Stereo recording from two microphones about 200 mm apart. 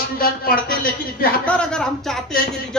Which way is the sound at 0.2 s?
45° left (ahead or behind).